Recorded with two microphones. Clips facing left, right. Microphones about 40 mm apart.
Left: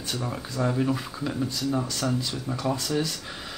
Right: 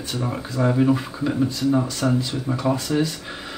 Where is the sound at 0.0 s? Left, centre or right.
Centre.